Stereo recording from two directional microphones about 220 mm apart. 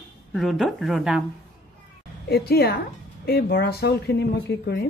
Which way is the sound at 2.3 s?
45° left (ahead or behind).